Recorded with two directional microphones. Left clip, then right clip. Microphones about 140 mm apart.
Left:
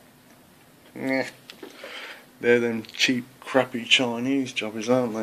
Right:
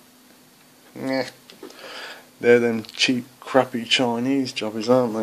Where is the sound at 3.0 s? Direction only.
15° right (ahead or behind).